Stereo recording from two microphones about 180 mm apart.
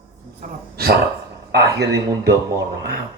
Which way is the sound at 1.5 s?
65° right (ahead or behind).